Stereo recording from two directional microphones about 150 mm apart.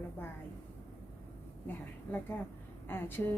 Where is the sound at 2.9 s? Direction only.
15° left (ahead or behind).